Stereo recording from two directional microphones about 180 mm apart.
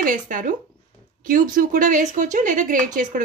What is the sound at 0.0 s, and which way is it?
A woman's voice, 45° right (ahead or behind).